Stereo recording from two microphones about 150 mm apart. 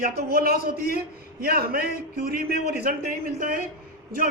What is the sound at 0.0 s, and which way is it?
A man's voice, 85° right.